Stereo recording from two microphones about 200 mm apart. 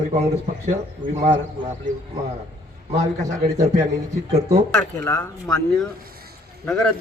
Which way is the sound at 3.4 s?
20° right (ahead or behind).